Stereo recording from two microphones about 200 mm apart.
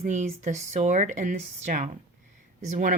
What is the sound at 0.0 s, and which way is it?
Speech, 35° right (ahead or behind).